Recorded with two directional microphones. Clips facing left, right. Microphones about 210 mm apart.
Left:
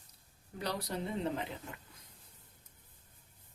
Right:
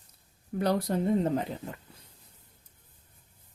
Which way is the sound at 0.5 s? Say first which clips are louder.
Right 10 dB; 50° right (ahead or behind).